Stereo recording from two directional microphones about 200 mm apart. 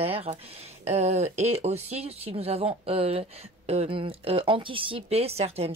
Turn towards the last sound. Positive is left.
turn(degrees=-30)  # may be behind; listen again after turning